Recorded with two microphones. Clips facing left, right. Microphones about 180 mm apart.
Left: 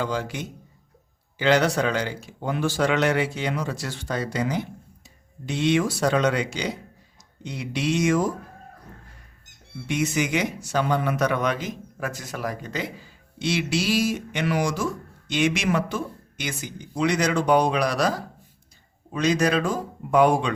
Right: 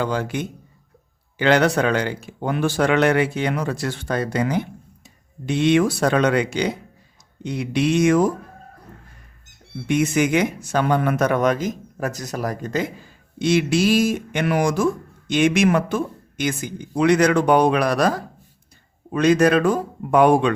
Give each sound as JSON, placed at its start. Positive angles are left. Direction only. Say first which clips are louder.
{"t": 0.0, "sound": "speech", "louder": "right 4 dB", "side_deg": -60}
{"t": 9.8, "sound": "speech", "louder": "right 6 dB", "side_deg": -55}